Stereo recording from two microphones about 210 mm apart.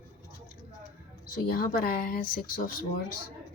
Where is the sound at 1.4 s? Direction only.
45° left (ahead or behind).